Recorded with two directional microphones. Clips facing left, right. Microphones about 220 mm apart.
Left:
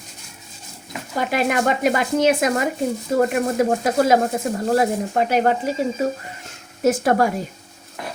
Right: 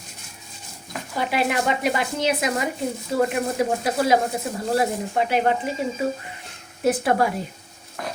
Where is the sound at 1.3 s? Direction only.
45° left (ahead or behind).